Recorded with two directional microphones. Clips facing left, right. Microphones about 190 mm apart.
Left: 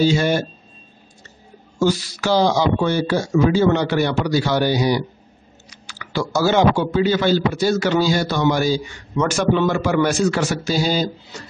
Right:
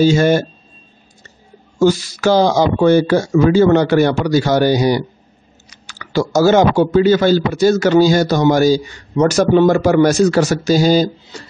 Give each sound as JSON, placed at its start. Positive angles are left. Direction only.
{"t": 0.0, "sound": "speech", "side_deg": -45}
{"t": 1.8, "sound": "speech", "side_deg": -45}